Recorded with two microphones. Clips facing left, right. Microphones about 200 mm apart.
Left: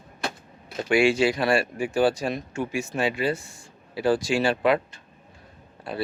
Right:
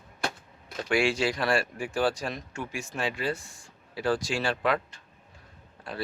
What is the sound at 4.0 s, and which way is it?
Speech, 5° left (ahead or behind).